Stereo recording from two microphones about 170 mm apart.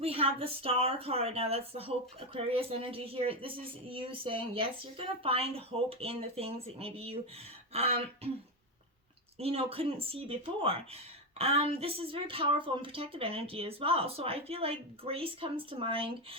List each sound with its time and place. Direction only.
0.0 s speech: 35° right (ahead or behind)
9.4 s speech: 35° right (ahead or behind)